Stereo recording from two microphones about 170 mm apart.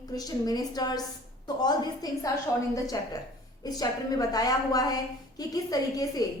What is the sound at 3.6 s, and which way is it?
A woman's voice, 20° left (ahead or behind).